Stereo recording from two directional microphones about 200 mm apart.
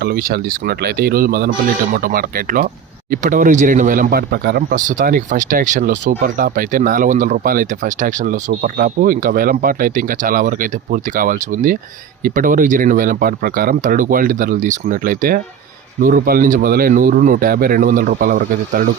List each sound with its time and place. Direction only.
0.0 s speech: 50° right (ahead or behind)